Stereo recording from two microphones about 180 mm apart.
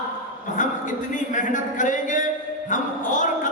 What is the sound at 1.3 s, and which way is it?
Speech, 45° left (ahead or behind).